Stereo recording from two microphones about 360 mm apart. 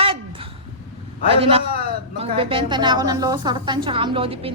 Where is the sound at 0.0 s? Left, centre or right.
Centre.